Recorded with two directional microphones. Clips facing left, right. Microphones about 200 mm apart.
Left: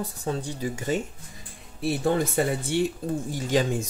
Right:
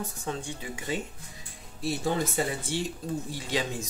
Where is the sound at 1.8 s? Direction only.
60° left (ahead or behind).